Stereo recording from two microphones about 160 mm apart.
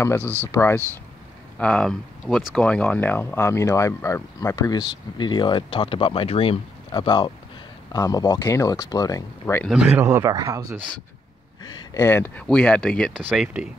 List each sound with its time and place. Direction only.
0.2 s speech: 15° right (ahead or behind)
0.5 s speech: 15° left (ahead or behind)
1.6 s speech: 5° left (ahead or behind)
9.7 s speech: 5° right (ahead or behind)
10.0 s speech: 20° right (ahead or behind)
11.6 s speech: 20° left (ahead or behind); by 13.1 s 5° left (ahead or behind)
13.2 s speech: 10° right (ahead or behind)